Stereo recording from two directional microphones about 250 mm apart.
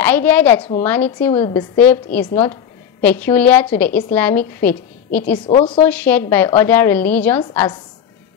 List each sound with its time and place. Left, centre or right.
0.0 s a woman's voice: centre
5.5 s a woman's voice: left
5.9 s a woman's voice: centre